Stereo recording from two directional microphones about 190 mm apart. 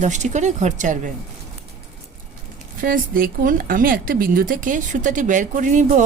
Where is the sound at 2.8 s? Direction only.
50° right (ahead or behind).